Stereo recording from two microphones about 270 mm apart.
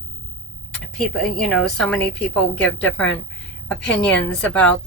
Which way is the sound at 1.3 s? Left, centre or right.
Centre.